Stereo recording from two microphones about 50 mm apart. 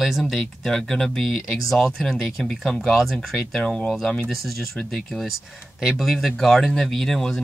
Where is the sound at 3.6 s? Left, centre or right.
Centre.